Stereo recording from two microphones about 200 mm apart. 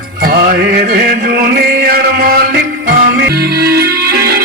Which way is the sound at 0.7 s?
50° right (ahead or behind).